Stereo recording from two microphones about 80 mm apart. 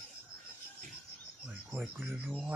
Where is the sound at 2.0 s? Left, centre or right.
Right.